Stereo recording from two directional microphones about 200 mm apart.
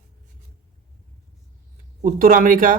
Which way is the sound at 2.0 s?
45° right (ahead or behind).